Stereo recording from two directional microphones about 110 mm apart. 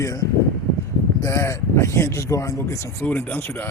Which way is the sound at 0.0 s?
30° left (ahead or behind).